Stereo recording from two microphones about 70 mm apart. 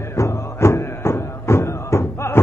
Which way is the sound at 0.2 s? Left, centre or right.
Left.